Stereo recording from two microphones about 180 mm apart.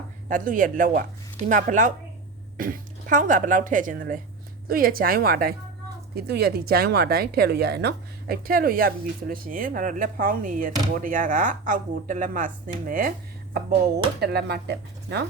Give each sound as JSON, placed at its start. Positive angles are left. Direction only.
{"t": 0.3, "sound": "speech", "side_deg": -45}
{"t": 14.2, "sound": "speech", "side_deg": -65}